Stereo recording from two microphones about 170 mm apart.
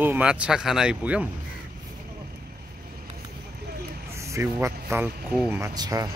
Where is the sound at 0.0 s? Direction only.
10° right (ahead or behind).